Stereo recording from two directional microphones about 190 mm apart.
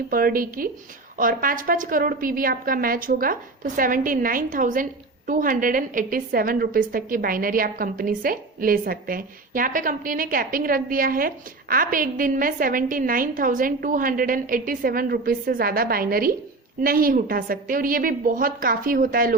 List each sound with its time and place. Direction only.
0.1 s a woman's voice: 50° right (ahead or behind)